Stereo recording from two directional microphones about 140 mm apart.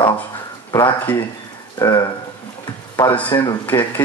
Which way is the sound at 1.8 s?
30° left (ahead or behind).